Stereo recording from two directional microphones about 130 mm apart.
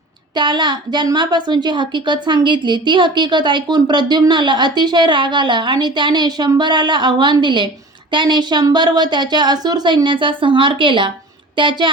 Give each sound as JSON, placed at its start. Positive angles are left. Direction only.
{"t": 0.3, "sound": "a woman's voice", "side_deg": -35}